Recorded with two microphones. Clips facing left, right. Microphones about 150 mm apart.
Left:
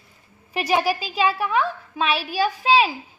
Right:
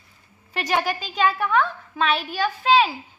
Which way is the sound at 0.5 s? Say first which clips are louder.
Left 3 dB; 10° left (ahead or behind).